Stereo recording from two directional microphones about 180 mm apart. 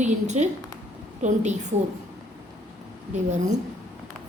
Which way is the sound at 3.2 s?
40° right (ahead or behind).